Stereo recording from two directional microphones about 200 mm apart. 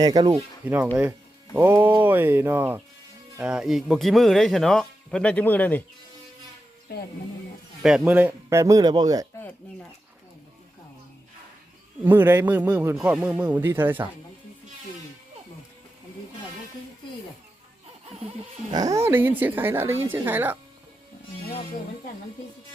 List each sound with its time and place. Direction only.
0.0 s speech: 20° right (ahead or behind)
0.6 s a man's voice: 10° right (ahead or behind); by 5.8 s 10° left (ahead or behind)
7.8 s a man's voice: 5° right (ahead or behind); by 9.2 s 20° right (ahead or behind)
12.0 s a man's voice: 10° right (ahead or behind)
18.7 s a man's voice: 15° right (ahead or behind)